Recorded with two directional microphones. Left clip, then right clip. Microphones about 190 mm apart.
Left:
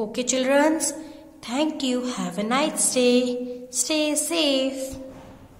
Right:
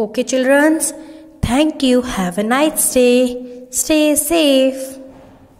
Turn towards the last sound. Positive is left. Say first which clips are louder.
# right 9 dB
turn(degrees=-30)  # may be behind; listen again after turning